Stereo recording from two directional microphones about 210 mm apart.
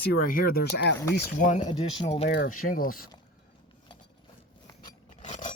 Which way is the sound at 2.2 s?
50° left (ahead or behind).